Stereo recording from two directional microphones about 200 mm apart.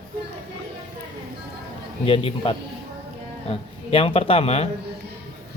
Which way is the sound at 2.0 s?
25° left (ahead or behind).